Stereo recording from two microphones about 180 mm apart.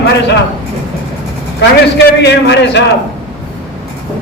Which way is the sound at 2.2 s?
70° left (ahead or behind).